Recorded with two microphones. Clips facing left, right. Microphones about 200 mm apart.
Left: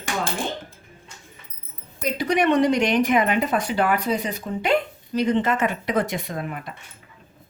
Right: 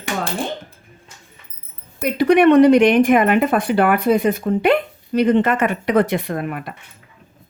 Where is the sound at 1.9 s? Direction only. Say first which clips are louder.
Right 8 dB; 65° right (ahead or behind).